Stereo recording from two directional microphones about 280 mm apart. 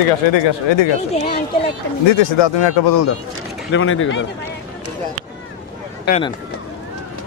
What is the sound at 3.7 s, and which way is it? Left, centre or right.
Speech, left.